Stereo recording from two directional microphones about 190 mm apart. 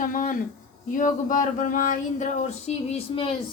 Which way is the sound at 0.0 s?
45° left (ahead or behind).